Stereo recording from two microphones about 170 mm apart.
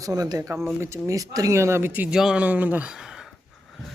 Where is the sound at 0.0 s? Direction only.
20° right (ahead or behind); by 3.3 s 5° right (ahead or behind).